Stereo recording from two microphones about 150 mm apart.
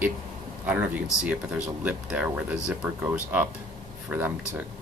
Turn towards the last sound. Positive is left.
turn(degrees=-15)  # may be behind; listen again after turning